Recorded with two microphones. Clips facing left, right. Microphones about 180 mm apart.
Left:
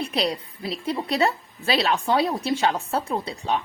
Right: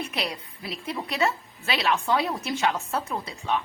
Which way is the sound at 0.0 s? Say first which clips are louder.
Left 6 dB; 35° left (ahead or behind).